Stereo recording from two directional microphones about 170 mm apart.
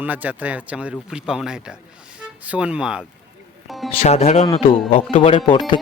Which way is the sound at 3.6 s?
Centre (ahead or behind).